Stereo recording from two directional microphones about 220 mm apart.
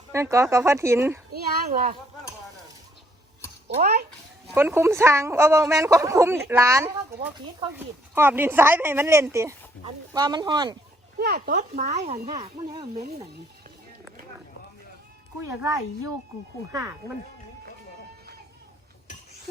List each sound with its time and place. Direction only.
0.1 s a woman's voice: 15° right (ahead or behind)
1.3 s speech: 40° right (ahead or behind)
3.8 s speech: 45° right (ahead or behind)
4.5 s a woman's voice: 10° right (ahead or behind)
11.2 s speech: 45° right (ahead or behind)
12.3 s speech: 20° right (ahead or behind)